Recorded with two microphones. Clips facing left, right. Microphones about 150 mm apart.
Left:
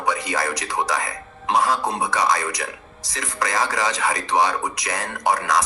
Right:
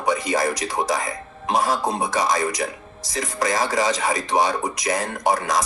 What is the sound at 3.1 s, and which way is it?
Speech, 25° right (ahead or behind).